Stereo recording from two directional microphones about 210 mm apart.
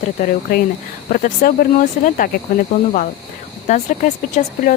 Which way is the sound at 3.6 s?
35° left (ahead or behind).